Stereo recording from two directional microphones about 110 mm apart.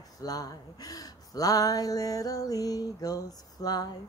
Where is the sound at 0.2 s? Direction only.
35° left (ahead or behind).